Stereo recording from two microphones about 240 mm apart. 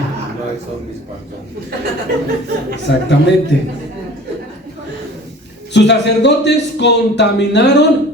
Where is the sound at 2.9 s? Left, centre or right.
Left.